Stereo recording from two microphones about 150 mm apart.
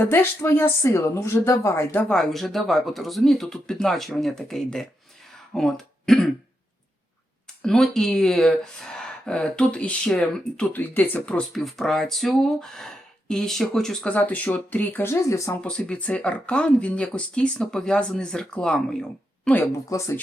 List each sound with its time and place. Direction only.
0.0 s speech: 15° left (ahead or behind)
2.0 s speech: centre (ahead or behind)
7.6 s speech: centre (ahead or behind); by 15.5 s 20° left (ahead or behind)
15.6 s speech: 5° left (ahead or behind)
19.9 s speech: 20° left (ahead or behind)